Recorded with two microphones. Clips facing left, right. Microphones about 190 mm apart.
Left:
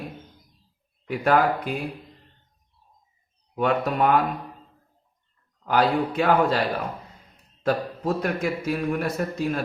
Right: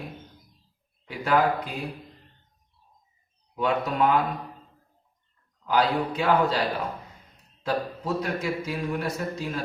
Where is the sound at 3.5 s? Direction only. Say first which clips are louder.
Left 3 dB; 60° left (ahead or behind).